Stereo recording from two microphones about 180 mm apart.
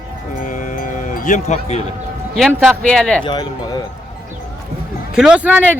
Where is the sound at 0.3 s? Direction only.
45° left (ahead or behind).